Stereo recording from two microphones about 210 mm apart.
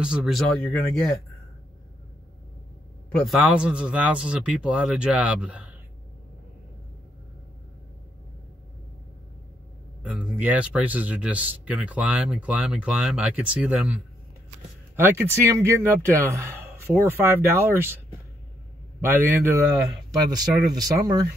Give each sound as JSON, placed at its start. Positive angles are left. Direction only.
{"t": 0.0, "sound": "speech", "side_deg": -5}
{"t": 3.1, "sound": "speech", "side_deg": 0}
{"t": 10.0, "sound": "speech", "side_deg": -5}
{"t": 15.0, "sound": "speech", "side_deg": -10}